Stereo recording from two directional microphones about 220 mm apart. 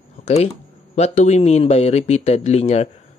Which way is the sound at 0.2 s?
30° left (ahead or behind).